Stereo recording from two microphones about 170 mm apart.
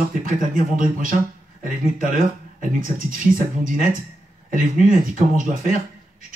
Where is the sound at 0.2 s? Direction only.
50° right (ahead or behind).